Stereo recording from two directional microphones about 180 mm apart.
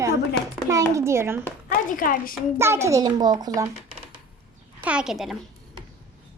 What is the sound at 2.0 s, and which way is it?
Speech, 50° left (ahead or behind).